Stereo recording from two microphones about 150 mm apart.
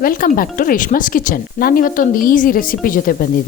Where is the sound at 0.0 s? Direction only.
70° left (ahead or behind).